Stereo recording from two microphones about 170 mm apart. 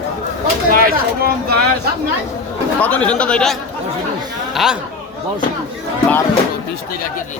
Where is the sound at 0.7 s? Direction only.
60° right (ahead or behind).